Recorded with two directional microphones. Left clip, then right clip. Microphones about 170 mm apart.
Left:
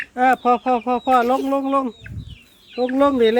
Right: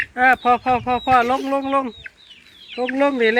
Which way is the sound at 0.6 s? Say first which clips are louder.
Right 1 dB; 5° right (ahead or behind).